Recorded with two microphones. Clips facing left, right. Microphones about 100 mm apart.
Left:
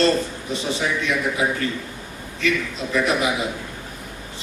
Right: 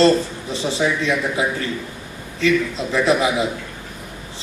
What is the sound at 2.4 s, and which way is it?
A man's voice, 30° right (ahead or behind).